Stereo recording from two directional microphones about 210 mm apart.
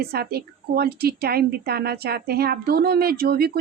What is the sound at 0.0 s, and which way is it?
A woman's voice, 50° right (ahead or behind).